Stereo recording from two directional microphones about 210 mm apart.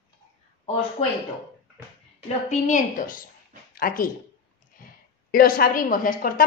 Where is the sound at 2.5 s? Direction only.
35° left (ahead or behind).